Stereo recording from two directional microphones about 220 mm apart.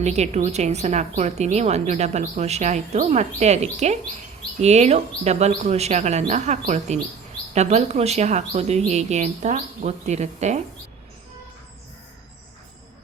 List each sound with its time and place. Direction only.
0.0 s a woman's voice: 30° right (ahead or behind)